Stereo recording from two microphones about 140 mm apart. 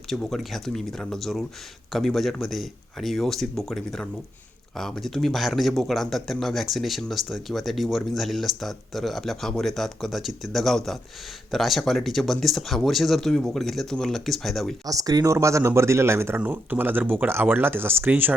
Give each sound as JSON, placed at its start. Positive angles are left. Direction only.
{"t": 0.1, "sound": "speech", "side_deg": 0}
{"t": 14.8, "sound": "speech", "side_deg": -25}